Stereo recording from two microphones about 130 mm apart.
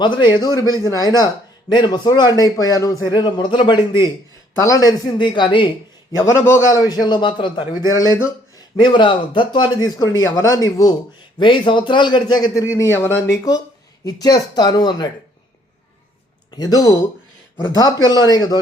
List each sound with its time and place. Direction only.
0.0 s a man's voice: 35° left (ahead or behind)
6.1 s a man's voice: 20° left (ahead or behind)
8.8 s a man's voice: 40° left (ahead or behind)
16.5 s a man's voice: 30° left (ahead or behind)